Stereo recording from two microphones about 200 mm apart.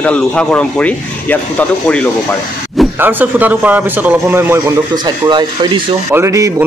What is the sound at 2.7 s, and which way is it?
A man's voice, 5° right (ahead or behind).